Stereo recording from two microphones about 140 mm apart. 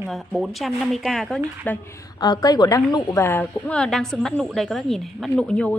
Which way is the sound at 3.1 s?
15° left (ahead or behind).